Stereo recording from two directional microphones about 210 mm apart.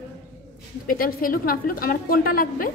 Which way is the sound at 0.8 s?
45° left (ahead or behind).